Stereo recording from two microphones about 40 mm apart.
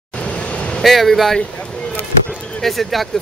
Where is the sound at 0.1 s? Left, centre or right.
Left.